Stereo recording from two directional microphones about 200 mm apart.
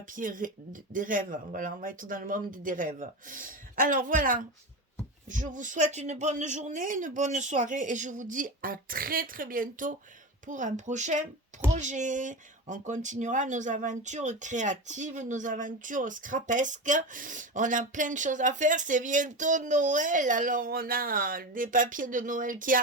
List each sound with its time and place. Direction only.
0.2 s speech: 40° right (ahead or behind)